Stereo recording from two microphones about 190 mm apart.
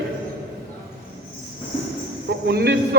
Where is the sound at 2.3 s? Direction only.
60° right (ahead or behind).